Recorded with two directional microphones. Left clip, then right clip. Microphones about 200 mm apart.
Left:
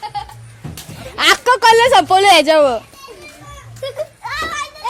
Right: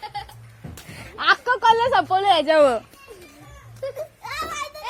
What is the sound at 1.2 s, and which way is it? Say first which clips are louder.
Speech: left 7 dB; 20° left (ahead or behind).